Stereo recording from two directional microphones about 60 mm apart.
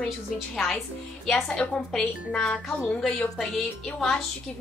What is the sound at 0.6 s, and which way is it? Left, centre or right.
A woman's voice, centre.